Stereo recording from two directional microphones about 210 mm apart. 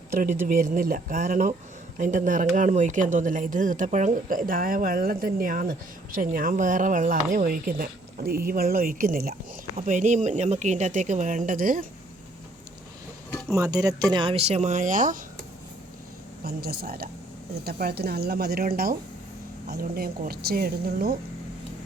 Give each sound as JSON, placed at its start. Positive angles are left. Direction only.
{"t": 0.4, "sound": "speech", "side_deg": -40}
{"t": 13.5, "sound": "speech", "side_deg": -15}
{"t": 16.4, "sound": "speech", "side_deg": -45}